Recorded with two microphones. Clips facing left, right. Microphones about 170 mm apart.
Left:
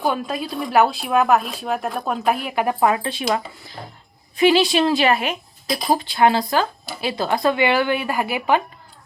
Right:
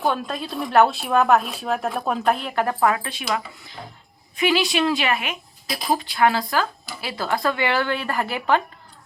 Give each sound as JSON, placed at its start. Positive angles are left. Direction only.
{"t": 0.0, "sound": "a woman's voice", "side_deg": 5}